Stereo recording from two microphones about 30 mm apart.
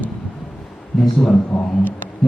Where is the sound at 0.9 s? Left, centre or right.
Centre.